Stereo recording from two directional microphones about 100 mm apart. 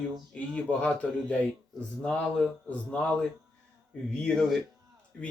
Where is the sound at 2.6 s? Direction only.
15° left (ahead or behind).